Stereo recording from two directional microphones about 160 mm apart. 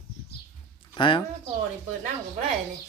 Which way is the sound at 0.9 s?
30° left (ahead or behind).